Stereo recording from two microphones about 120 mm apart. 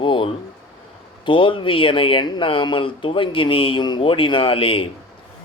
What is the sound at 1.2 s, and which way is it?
Speech, 45° left (ahead or behind).